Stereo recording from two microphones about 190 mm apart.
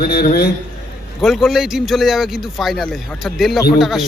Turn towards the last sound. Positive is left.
turn(degrees=0)  # may be behind; listen again after turning